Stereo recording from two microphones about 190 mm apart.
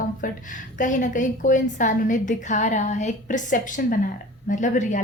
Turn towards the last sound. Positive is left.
turn(degrees=40)  # may be behind; listen again after turning